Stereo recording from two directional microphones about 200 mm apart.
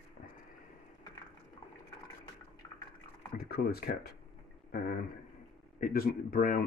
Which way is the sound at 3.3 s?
50° left (ahead or behind).